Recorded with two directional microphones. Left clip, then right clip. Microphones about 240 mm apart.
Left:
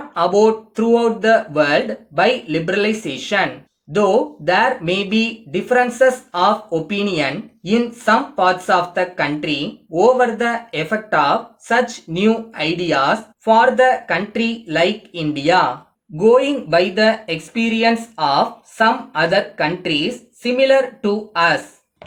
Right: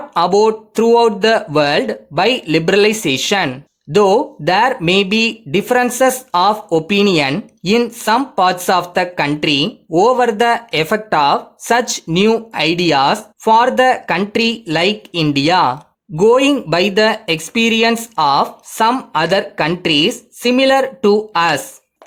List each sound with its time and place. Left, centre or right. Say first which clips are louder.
0.1 s speech: right 2 dB; right